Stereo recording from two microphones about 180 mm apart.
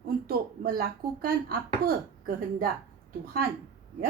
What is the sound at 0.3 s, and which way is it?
Speech, 55° right (ahead or behind).